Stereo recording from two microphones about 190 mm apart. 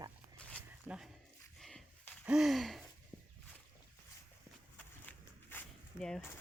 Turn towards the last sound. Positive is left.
turn(degrees=10)  # may be behind; listen again after turning